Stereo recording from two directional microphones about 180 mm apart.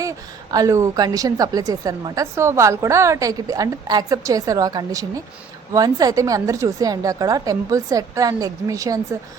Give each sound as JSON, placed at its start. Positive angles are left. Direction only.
{"t": 0.5, "sound": "a woman's voice", "side_deg": -20}